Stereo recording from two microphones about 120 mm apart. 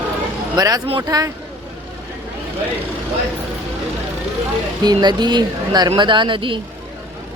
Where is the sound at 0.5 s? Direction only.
30° right (ahead or behind).